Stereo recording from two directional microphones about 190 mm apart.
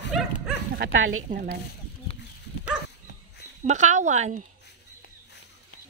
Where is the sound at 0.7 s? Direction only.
80° right.